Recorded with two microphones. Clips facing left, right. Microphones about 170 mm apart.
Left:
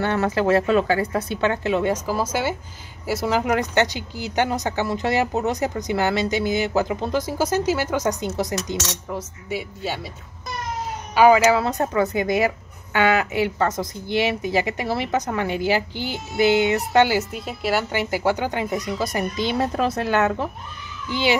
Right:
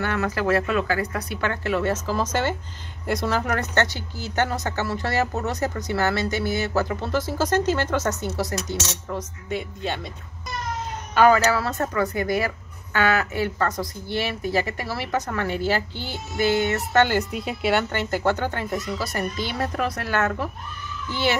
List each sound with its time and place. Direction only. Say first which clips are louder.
0.0 s speech: left 4 dB; 30° left (ahead or behind); by 9.9 s 5° left (ahead or behind)
11.1 s speech: left 3 dB; 10° left (ahead or behind)
17.9 s speech: left 1 dB; 10° left (ahead or behind)